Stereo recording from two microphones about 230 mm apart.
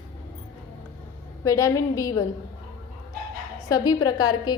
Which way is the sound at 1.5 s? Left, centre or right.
Centre.